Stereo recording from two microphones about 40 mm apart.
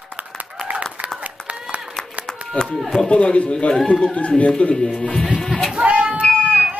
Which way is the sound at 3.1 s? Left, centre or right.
Left.